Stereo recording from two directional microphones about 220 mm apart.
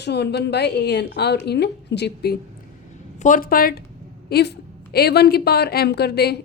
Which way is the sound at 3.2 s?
35° left (ahead or behind).